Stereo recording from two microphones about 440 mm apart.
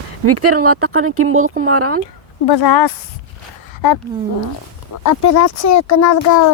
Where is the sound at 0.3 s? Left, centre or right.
Right.